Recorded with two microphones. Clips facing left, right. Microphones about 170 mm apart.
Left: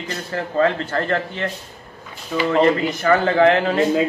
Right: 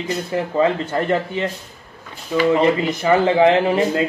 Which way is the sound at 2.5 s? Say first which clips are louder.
Even; 15° right (ahead or behind).